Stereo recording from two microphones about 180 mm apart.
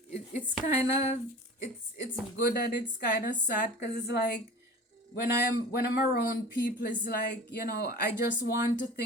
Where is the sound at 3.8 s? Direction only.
65° left (ahead or behind).